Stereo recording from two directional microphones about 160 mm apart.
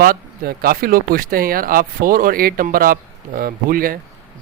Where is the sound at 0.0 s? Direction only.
65° right (ahead or behind).